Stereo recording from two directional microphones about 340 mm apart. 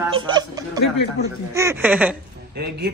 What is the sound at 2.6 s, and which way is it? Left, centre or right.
Speech, right.